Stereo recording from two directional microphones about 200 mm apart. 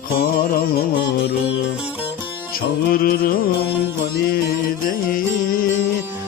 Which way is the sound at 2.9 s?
50° left (ahead or behind).